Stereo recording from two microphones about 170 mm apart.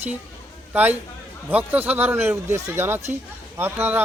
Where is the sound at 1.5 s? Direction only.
10° right (ahead or behind).